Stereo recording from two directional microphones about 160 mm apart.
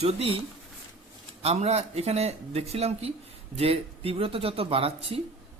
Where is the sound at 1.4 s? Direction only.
40° right (ahead or behind).